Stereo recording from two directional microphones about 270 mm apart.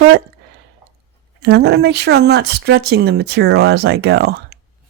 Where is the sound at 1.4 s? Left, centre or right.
Right.